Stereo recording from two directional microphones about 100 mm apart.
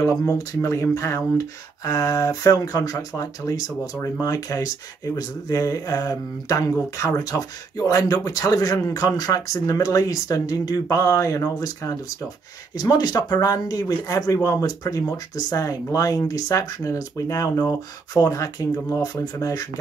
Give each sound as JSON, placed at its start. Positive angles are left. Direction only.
{"t": 0.0, "sound": "speech", "side_deg": 30}
{"t": 12.7, "sound": "speech", "side_deg": 45}